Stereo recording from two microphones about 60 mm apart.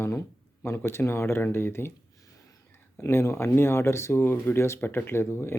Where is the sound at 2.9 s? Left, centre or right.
Left.